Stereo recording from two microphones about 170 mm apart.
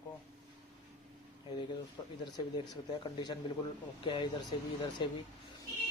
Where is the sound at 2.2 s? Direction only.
25° left (ahead or behind).